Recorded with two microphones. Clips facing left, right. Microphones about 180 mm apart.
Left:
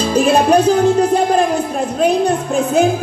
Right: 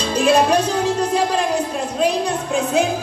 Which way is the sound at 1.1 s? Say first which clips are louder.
Left 5 dB; 55° left (ahead or behind).